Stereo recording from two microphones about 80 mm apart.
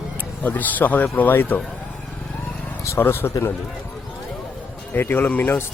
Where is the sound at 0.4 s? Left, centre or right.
Left.